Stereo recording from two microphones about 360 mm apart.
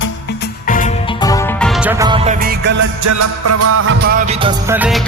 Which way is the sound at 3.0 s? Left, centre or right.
Right.